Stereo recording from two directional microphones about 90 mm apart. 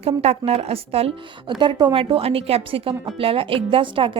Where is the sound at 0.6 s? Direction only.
90° right.